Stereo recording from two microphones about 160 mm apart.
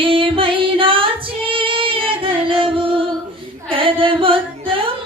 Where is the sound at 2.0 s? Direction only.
35° right (ahead or behind).